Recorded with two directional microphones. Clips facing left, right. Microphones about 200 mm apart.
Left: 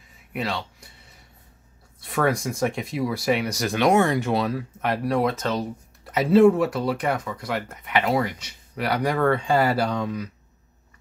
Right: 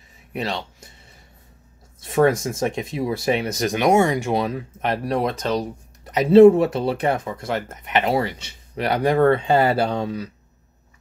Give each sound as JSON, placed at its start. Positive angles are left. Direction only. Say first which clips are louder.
{"t": 0.3, "sound": "speech", "louder": "right 2 dB", "side_deg": -25}
{"t": 2.0, "sound": "speech", "louder": "right 5 dB", "side_deg": -20}